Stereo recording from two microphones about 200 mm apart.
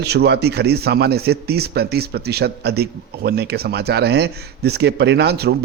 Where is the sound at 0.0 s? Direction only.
55° right (ahead or behind).